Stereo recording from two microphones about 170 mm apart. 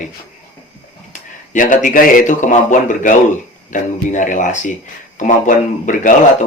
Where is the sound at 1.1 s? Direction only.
50° left (ahead or behind).